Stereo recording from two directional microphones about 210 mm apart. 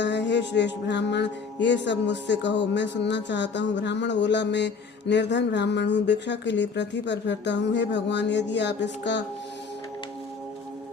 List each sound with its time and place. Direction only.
0.0 s music: 55° left (ahead or behind)
1.6 s speech: 60° left (ahead or behind)